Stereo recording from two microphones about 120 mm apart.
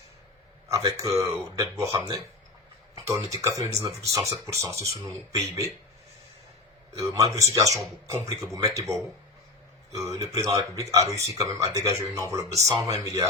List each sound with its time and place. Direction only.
0.7 s speech: 25° right (ahead or behind)
7.1 s speech: 25° right (ahead or behind)